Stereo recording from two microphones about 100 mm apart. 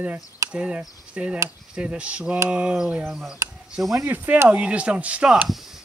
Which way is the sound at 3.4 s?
30° right (ahead or behind).